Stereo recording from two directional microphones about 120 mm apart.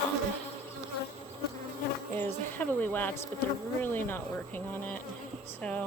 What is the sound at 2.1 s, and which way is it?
Speech, 15° left (ahead or behind).